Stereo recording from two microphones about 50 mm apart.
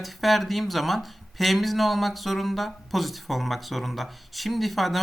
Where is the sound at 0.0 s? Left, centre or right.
Centre.